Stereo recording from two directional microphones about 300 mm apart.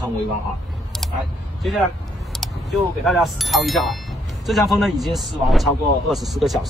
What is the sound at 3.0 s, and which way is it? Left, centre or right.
A man's voice, centre.